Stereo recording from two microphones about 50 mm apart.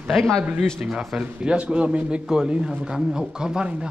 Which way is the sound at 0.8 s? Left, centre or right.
Centre.